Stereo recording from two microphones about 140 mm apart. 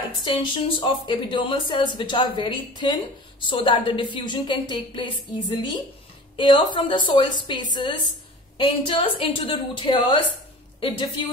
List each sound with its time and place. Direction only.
0.2 s speech: 35° left (ahead or behind)